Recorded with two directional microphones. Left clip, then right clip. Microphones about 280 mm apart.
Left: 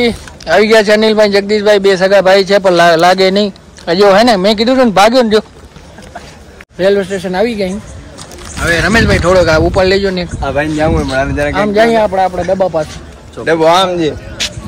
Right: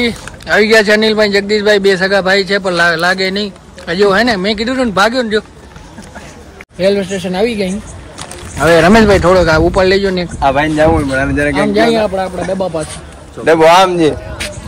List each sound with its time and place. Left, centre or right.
0.0 s a man's voice: centre
6.8 s a man's voice: centre
8.6 s speech: centre
10.4 s speech: centre
11.1 s a man's voice: centre
12.2 s speech: centre
12.5 s speech: centre
13.5 s speech: right